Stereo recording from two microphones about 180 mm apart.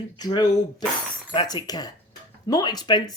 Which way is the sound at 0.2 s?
20° left (ahead or behind).